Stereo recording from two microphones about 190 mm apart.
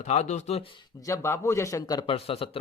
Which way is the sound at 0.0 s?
40° left (ahead or behind).